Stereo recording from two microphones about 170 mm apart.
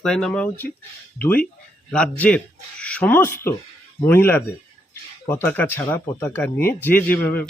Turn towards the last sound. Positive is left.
turn(degrees=10)  # may be behind; listen again after turning